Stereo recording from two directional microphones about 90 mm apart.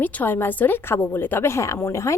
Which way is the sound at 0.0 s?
20° left (ahead or behind).